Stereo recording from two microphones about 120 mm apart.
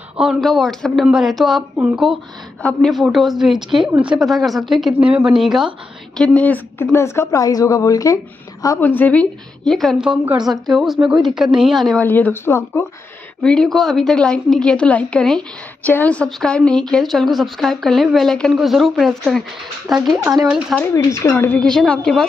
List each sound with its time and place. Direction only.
0.2 s speech: centre (ahead or behind)
6.2 s speech: 10° left (ahead or behind); by 8.2 s 30° left (ahead or behind)
8.8 s a woman's voice: 15° left (ahead or behind)
12.0 s a woman's voice: 15° left (ahead or behind)
13.4 s a woman's voice: 5° left (ahead or behind)
20.3 s speech: 25° right (ahead or behind)
20.8 s speech: 25° left (ahead or behind)
21.5 s a woman's voice: 5° left (ahead or behind)